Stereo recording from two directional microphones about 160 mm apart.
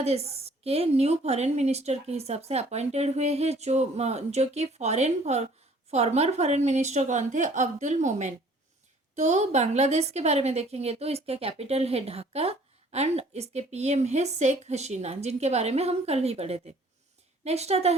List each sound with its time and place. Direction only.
0.0 s a woman's voice: 40° right (ahead or behind)